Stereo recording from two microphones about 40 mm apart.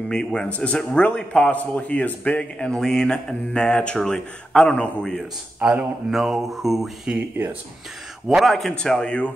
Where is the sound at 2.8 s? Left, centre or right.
Centre.